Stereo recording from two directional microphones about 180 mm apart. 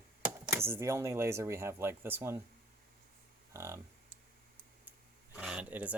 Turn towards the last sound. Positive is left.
turn(degrees=-10)  # may be behind; listen again after turning